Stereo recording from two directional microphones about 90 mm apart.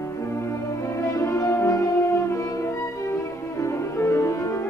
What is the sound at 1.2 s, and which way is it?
Music, 35° left (ahead or behind).